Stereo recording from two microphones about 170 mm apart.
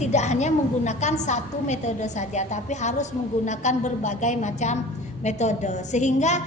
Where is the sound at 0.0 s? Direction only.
40° left (ahead or behind).